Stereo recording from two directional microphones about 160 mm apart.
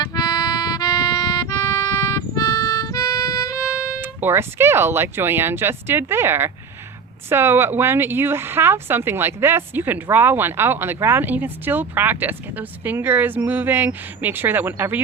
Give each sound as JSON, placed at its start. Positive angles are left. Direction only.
{"t": 0.0, "sound": "music", "side_deg": 25}
{"t": 3.6, "sound": "speech", "side_deg": -10}